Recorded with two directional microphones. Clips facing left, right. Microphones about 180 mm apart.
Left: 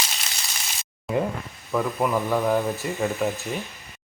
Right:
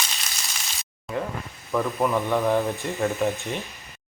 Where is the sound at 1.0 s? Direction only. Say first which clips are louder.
Left 5 dB; 15° left (ahead or behind).